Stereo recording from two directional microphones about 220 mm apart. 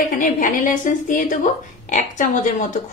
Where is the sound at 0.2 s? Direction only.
35° left (ahead or behind).